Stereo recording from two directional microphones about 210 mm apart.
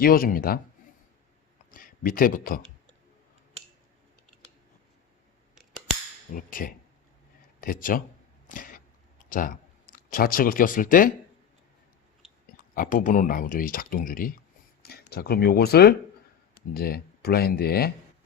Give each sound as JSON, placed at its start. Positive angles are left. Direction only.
{"t": 0.0, "sound": "speech", "side_deg": 45}
{"t": 1.7, "sound": "speech", "side_deg": 40}
{"t": 6.3, "sound": "speech", "side_deg": 40}
{"t": 8.4, "sound": "a sound", "side_deg": 40}
{"t": 12.5, "sound": "speech", "side_deg": 40}